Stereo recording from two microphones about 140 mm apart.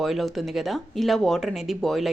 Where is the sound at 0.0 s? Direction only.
Centre (ahead or behind).